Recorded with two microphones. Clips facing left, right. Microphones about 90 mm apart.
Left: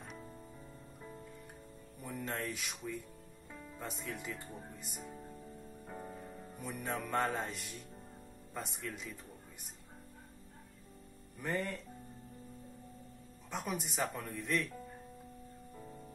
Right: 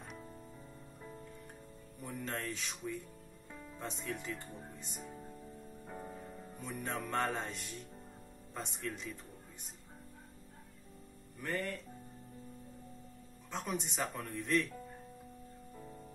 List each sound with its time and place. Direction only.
0.0 s music: centre (ahead or behind)
2.0 s speech: centre (ahead or behind)
11.4 s speech: 20° left (ahead or behind)
13.5 s speech: 10° left (ahead or behind)
15.7 s music: centre (ahead or behind)